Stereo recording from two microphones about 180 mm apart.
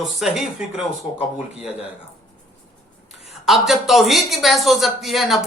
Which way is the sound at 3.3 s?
Centre (ahead or behind).